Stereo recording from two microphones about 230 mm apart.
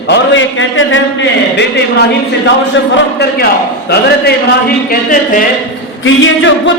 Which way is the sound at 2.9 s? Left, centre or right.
Left.